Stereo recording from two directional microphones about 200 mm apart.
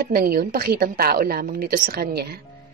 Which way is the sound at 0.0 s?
50° right (ahead or behind).